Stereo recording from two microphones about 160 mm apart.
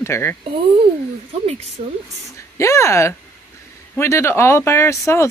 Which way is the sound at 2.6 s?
20° left (ahead or behind).